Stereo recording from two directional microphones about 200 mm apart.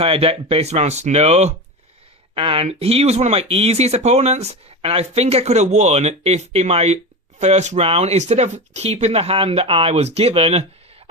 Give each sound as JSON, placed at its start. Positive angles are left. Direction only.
{"t": 0.0, "sound": "speech", "side_deg": -30}